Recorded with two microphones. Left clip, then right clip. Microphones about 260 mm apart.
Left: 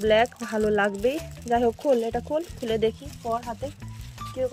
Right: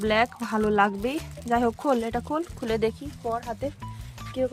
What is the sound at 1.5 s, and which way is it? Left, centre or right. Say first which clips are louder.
Speech: left 1 dB; right.